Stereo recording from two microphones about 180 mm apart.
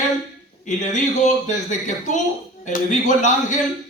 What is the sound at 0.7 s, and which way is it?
Speech, 40° left (ahead or behind).